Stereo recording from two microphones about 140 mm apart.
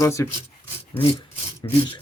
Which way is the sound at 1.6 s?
30° left (ahead or behind).